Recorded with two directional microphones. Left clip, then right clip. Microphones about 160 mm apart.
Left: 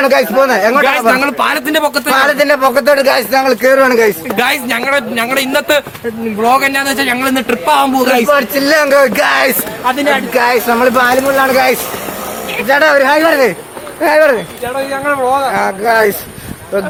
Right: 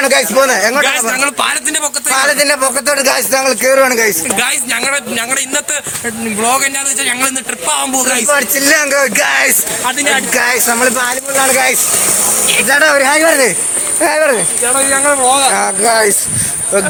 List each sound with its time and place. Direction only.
0.0 s speech: 5° left (ahead or behind)
0.3 s speech: 15° right (ahead or behind)
0.9 s speech: centre (ahead or behind)
2.1 s a man's voice: 25° right (ahead or behind)
4.3 s a man's voice: 15° left (ahead or behind); by 8.3 s centre (ahead or behind)
8.3 s a man's voice: 15° right (ahead or behind)
12.6 s a man's voice: 25° right (ahead or behind)
14.0 s speech: 45° right (ahead or behind)
14.9 s speech: 60° right (ahead or behind); by 16.1 s 40° right (ahead or behind)